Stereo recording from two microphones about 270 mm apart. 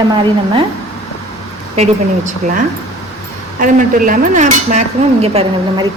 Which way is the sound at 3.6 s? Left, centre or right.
Right.